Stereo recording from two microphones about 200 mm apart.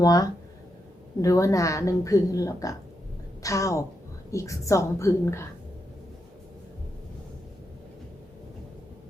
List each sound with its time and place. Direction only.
0.0 s a woman's voice: 15° left (ahead or behind)